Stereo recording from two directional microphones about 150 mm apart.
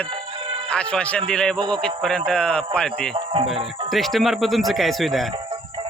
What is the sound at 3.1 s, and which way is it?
Speech, 35° right (ahead or behind).